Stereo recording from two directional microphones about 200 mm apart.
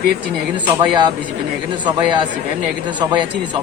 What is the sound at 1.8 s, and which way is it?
Speech, 20° right (ahead or behind).